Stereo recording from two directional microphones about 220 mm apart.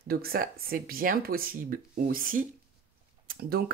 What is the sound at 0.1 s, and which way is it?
Speech, 45° right (ahead or behind).